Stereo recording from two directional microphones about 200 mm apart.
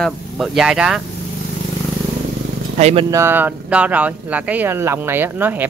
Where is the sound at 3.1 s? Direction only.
10° right (ahead or behind).